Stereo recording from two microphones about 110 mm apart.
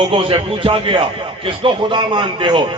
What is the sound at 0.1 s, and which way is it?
A man's voice, 50° right (ahead or behind).